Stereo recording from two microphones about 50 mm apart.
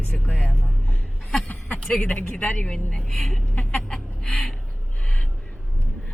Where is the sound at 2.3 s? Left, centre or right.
Left.